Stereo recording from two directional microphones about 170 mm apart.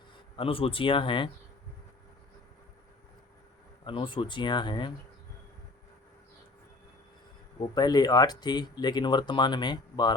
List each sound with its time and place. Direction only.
0.3 s speech: 35° left (ahead or behind)
3.8 s speech: 30° left (ahead or behind)
7.6 s speech: 25° left (ahead or behind)